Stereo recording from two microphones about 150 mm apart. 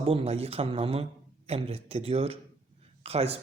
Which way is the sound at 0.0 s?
40° right (ahead or behind).